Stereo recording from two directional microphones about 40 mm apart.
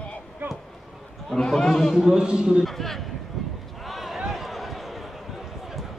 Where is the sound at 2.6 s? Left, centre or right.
Centre.